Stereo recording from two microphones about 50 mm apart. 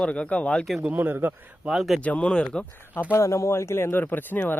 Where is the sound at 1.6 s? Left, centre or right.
Centre.